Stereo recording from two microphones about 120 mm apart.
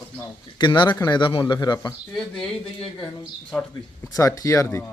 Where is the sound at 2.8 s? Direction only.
40° left (ahead or behind).